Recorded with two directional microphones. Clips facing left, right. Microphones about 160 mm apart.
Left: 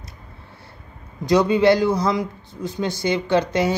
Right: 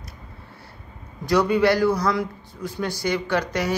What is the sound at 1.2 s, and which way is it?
Speech, 20° left (ahead or behind).